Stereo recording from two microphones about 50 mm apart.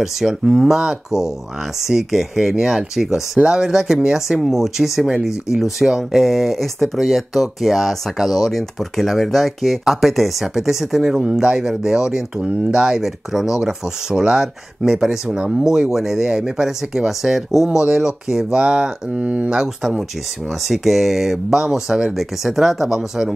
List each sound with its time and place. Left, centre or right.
0.0 s speech: centre
15.9 s speech: centre
17.6 s speech: centre
19.2 s speech: right
19.5 s speech: centre